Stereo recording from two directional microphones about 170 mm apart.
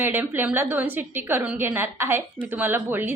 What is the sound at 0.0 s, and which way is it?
A woman's voice, 10° right (ahead or behind).